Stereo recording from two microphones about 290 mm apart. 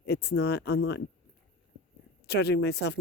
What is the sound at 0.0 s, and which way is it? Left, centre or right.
Speech, left.